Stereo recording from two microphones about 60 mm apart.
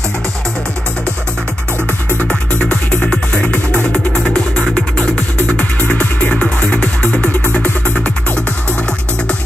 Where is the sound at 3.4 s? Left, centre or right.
Left.